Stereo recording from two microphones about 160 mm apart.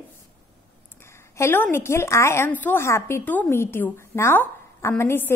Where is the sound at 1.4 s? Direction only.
15° left (ahead or behind).